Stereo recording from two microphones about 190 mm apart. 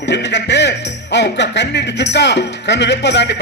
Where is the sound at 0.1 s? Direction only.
65° left (ahead or behind).